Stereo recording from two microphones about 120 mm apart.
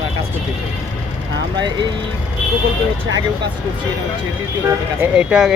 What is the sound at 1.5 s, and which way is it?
Speech, 40° right (ahead or behind).